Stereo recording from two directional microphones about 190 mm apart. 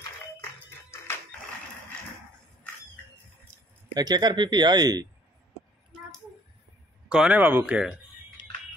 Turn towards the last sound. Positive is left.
turn(degrees=-5)  # may be behind; listen again after turning